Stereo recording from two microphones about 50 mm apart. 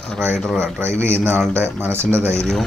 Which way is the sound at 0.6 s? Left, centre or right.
Right.